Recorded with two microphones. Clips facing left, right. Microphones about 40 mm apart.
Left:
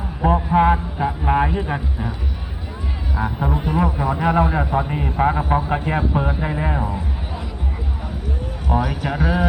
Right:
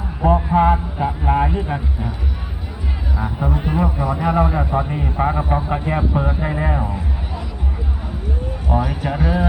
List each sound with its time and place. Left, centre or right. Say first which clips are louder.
0.2 s a sound: right 1 dB; centre
0.9 s a sound: right 1 dB; centre
1.5 s speech: even; centre
3.2 s speech: left 1 dB; centre
4.7 s speech: even; centre
8.7 s speech: even; centre